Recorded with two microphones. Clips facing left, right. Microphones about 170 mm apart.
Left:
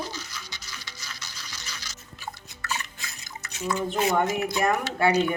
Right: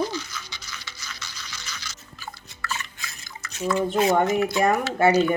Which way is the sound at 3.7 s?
25° right (ahead or behind).